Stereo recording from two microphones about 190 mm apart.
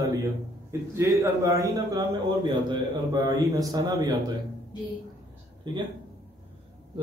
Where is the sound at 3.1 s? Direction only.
20° right (ahead or behind).